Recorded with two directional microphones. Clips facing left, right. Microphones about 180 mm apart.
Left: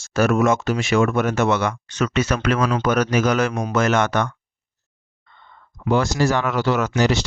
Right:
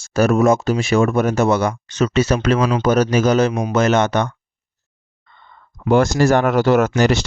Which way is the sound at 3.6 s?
20° right (ahead or behind).